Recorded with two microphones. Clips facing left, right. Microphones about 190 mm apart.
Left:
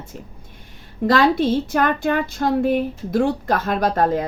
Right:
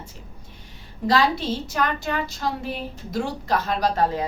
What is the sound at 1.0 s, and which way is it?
Music, 55° left (ahead or behind).